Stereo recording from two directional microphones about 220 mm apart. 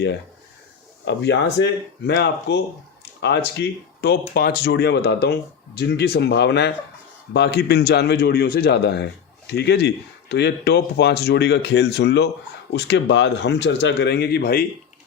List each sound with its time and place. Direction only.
1.0 s speech: 50° left (ahead or behind)